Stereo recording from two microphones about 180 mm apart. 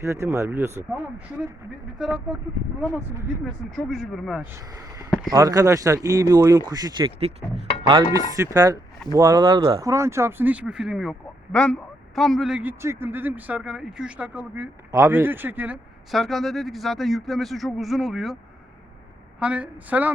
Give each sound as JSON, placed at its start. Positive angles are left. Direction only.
{"t": 0.0, "sound": "speech", "side_deg": -15}
{"t": 2.0, "sound": "speech", "side_deg": -5}
{"t": 3.4, "sound": "speech", "side_deg": 0}
{"t": 4.5, "sound": "speech", "side_deg": -15}
{"t": 8.5, "sound": "speech", "side_deg": -20}
{"t": 19.4, "sound": "speech", "side_deg": -5}